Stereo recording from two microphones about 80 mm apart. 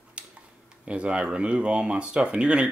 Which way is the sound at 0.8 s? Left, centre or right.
Centre.